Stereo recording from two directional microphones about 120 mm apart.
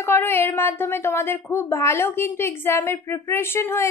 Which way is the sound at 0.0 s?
20° left (ahead or behind).